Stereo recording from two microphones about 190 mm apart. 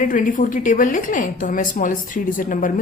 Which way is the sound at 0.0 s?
45° left (ahead or behind).